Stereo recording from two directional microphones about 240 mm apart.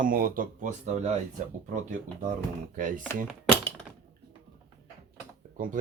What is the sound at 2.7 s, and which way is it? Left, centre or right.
Speech, right.